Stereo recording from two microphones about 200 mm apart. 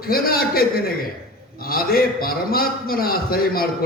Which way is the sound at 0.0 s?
50° left (ahead or behind).